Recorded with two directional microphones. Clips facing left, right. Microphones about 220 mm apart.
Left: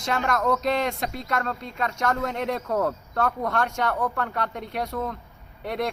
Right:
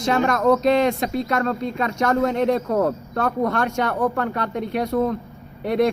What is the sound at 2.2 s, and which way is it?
A man's voice, 40° right (ahead or behind).